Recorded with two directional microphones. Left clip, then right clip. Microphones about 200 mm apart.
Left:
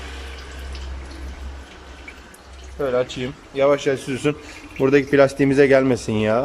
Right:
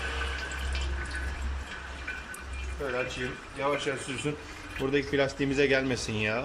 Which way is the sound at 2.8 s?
60° left (ahead or behind).